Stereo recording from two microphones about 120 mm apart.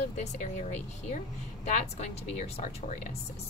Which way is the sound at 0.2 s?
80° left.